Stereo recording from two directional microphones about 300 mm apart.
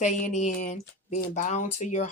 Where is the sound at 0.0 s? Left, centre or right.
Left.